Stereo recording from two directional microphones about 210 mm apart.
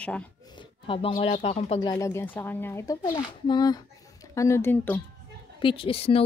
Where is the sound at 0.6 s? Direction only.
25° left (ahead or behind).